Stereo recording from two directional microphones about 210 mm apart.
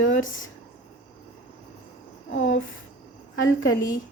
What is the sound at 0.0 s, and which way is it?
Speech, 70° left (ahead or behind).